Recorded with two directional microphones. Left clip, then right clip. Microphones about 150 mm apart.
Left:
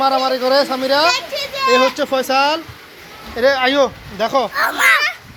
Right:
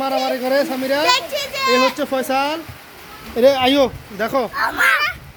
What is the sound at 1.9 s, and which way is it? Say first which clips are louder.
Speech: left 3 dB; 15° right (ahead or behind).